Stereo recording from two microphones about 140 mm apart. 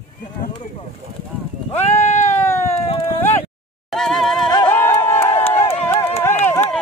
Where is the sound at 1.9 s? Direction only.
60° left (ahead or behind).